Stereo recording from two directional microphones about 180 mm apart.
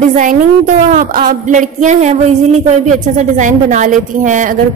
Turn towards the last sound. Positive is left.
turn(degrees=-45)  # may be behind; listen again after turning